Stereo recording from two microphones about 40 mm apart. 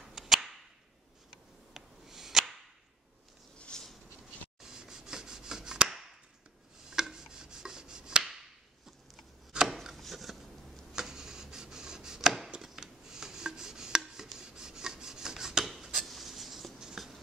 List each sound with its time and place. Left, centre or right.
0.0 s cap gun: centre
1.7 s a sound: centre
3.7 s a sound: centre
4.6 s chopping: centre
6.9 s rub: centre
9.5 s chopping: centre
9.9 s a sound: centre
10.9 s chopping: centre
12.6 s filing: centre
16.1 s writing: centre